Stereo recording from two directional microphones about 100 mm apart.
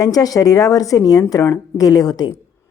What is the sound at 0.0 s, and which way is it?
Speech, 40° left (ahead or behind).